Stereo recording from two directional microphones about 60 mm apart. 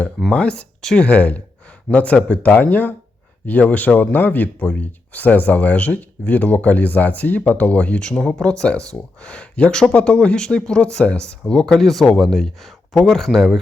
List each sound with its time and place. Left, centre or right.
0.3 s speech: centre
1.0 s speech: left; by 13.6 s centre